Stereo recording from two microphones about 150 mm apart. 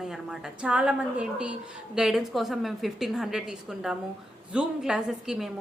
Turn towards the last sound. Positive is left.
turn(degrees=-5)  # may be behind; listen again after turning